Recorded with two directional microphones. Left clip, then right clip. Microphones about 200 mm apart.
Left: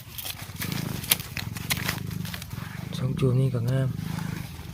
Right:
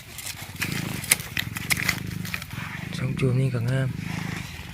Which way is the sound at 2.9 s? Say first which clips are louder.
Left 1 dB; 10° left (ahead or behind).